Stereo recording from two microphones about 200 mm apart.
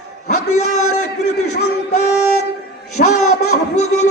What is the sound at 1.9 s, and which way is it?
Music, 35° left (ahead or behind).